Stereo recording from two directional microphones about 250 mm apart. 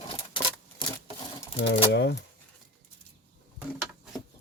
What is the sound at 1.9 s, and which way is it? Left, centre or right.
Speech, left.